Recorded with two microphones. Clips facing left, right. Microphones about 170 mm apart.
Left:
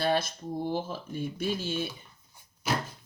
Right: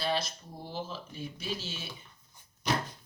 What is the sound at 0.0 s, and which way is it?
Speech, 50° left (ahead or behind).